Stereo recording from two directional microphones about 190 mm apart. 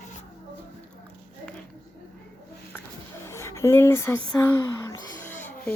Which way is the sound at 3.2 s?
15° left (ahead or behind).